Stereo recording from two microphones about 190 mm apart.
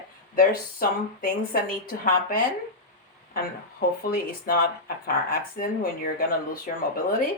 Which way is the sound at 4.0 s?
50° left (ahead or behind).